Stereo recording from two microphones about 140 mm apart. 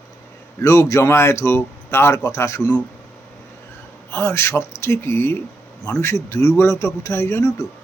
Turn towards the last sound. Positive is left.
turn(degrees=20)  # may be behind; listen again after turning